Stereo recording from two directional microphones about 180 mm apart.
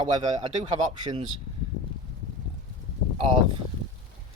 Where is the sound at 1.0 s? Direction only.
25° right (ahead or behind).